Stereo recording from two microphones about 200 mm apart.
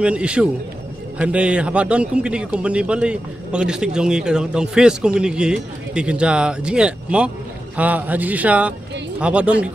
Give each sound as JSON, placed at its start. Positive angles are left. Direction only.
{"t": 0.0, "sound": "a man's voice", "side_deg": -5}